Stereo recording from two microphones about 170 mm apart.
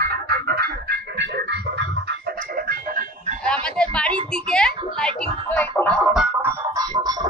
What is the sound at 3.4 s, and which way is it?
A child's voice, 5° left (ahead or behind).